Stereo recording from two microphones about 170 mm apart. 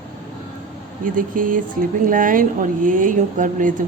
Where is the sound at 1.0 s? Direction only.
55° right (ahead or behind).